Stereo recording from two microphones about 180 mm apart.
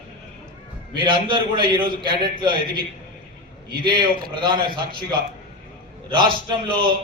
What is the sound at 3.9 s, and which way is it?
A man's voice, 25° right (ahead or behind).